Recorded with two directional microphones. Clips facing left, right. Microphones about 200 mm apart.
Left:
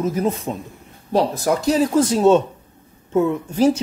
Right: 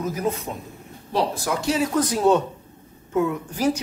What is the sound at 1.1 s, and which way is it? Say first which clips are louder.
Speech: left 5 dB; 40° left (ahead or behind).